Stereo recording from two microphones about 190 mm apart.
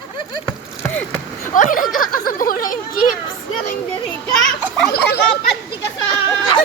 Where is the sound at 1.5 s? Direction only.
45° left (ahead or behind).